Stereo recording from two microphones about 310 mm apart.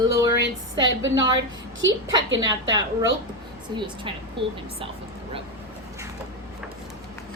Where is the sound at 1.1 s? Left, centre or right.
Centre.